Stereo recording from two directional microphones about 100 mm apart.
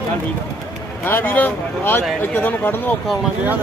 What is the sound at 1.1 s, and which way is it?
Speech, 20° left (ahead or behind).